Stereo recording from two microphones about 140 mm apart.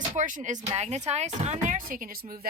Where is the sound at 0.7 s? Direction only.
55° right (ahead or behind); by 2.4 s 90° right.